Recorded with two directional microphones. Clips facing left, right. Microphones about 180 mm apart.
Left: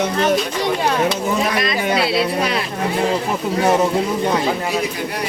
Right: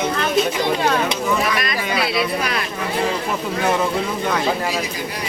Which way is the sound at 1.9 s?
25° left (ahead or behind).